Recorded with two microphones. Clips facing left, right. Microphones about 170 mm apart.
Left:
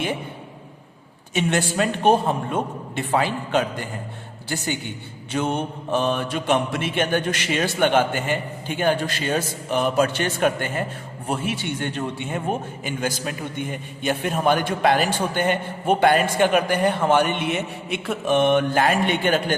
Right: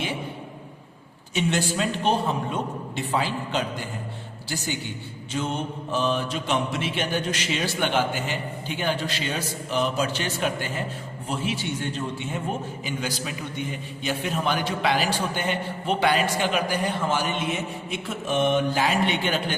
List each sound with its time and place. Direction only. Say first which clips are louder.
1.3 s a man's voice: left 2 dB; 55° left (ahead or behind)